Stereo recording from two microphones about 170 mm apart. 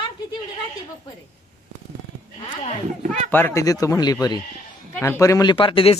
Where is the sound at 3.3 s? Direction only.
10° left (ahead or behind).